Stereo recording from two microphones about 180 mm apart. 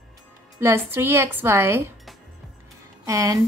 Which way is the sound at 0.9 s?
15° right (ahead or behind).